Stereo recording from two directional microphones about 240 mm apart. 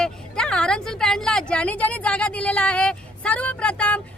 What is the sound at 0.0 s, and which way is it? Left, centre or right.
A woman's voice, centre.